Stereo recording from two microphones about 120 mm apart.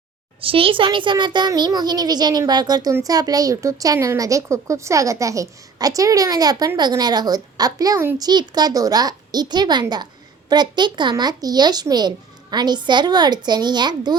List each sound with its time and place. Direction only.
0.4 s a child's voice: 50° right (ahead or behind); by 8.1 s 25° right (ahead or behind)
8.2 s a child's voice: 35° right (ahead or behind)